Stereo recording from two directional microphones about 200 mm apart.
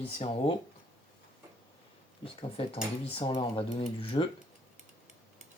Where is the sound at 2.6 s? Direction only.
30° left (ahead or behind).